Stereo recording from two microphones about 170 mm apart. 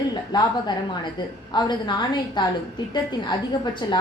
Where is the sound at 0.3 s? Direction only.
25° left (ahead or behind).